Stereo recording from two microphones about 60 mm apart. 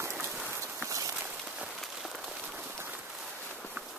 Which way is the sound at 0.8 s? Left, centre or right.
Right.